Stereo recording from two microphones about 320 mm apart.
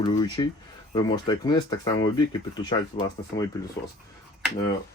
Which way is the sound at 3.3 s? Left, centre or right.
Centre.